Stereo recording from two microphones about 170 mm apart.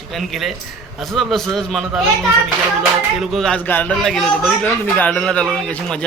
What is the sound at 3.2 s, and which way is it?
A man's voice, centre (ahead or behind).